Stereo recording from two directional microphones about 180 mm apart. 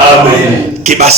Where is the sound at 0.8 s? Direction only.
40° right (ahead or behind).